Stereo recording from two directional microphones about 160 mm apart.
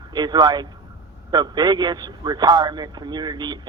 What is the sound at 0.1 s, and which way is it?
A man's voice, 25° right (ahead or behind).